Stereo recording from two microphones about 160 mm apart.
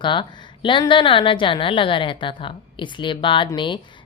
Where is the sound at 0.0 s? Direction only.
30° left (ahead or behind).